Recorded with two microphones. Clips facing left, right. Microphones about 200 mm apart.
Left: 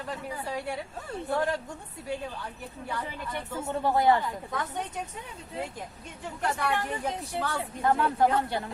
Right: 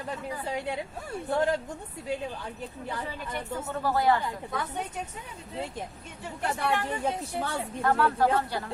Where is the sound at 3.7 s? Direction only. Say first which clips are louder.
Left 2 dB; 20° left (ahead or behind).